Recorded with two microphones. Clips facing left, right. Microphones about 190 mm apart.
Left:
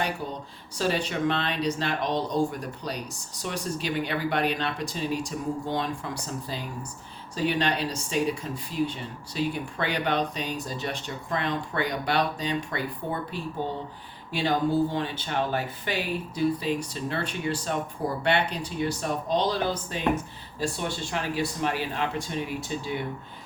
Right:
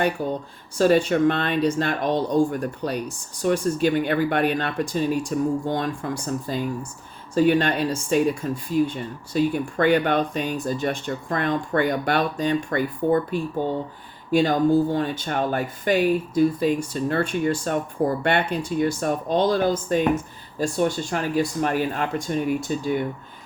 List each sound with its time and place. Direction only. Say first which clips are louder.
0.8 s speech: right 9 dB; 50° right (ahead or behind)